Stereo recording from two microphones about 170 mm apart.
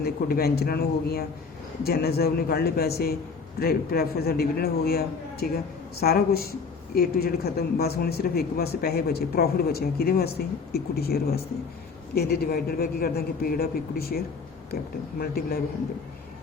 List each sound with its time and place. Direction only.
0.0 s speech: 65° left (ahead or behind)
15.2 s speech: 65° left (ahead or behind)